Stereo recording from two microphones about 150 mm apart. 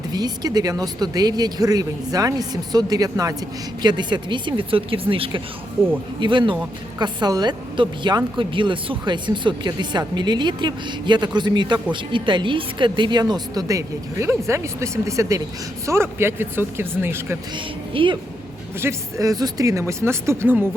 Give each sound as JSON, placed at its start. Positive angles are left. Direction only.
{"t": 0.1, "sound": "a woman's voice", "side_deg": -25}
{"t": 17.5, "sound": "a woman's voice", "side_deg": -35}
{"t": 18.8, "sound": "speech", "side_deg": -20}